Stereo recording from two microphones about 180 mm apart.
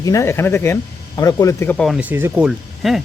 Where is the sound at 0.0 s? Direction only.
15° left (ahead or behind).